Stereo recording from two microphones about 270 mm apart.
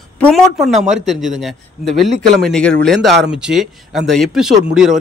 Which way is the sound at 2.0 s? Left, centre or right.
Right.